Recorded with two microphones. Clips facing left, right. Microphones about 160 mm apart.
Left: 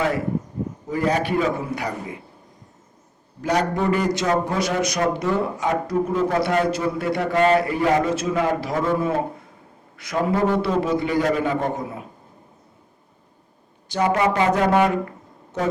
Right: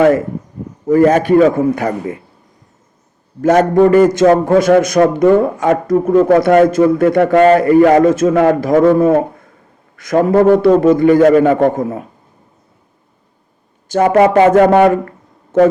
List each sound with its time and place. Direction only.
0.9 s a man's voice: 50° right (ahead or behind)
3.4 s a man's voice: 50° right (ahead or behind)
9.9 s a sound: 45° right (ahead or behind)
10.2 s a man's voice: 50° right (ahead or behind)
11.3 s speech: 65° right (ahead or behind)
13.8 s a woman's voice: 50° right (ahead or behind)